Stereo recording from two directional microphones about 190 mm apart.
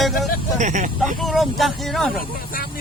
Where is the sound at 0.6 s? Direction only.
40° right (ahead or behind).